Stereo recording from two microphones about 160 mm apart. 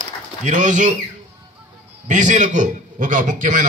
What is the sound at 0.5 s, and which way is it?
Speech, 50° right (ahead or behind).